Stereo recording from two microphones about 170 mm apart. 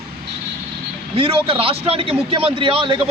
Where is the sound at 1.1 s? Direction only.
30° right (ahead or behind).